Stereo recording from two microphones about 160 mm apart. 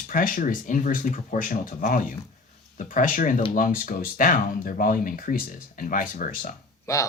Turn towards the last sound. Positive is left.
turn(degrees=20)  # may be behind; listen again after turning